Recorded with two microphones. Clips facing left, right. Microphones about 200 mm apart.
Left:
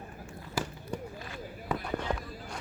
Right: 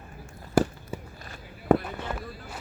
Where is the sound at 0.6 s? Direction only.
50° right (ahead or behind).